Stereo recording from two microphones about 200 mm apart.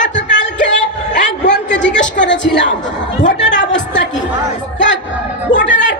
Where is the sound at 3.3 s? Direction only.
65° left (ahead or behind).